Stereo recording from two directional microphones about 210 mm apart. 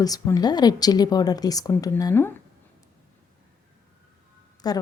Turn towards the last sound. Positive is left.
turn(degrees=20)  # may be behind; listen again after turning